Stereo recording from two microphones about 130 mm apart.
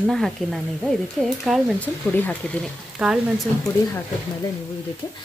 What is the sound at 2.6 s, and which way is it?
Speech, 5° right (ahead or behind).